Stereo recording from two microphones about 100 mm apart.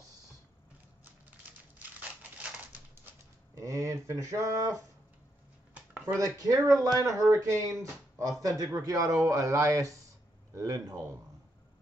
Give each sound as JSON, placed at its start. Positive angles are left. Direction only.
{"t": 1.8, "sound": "crumpling", "side_deg": -15}
{"t": 3.5, "sound": "speech", "side_deg": -35}
{"t": 5.8, "sound": "a sound", "side_deg": -15}
{"t": 6.1, "sound": "speech", "side_deg": -35}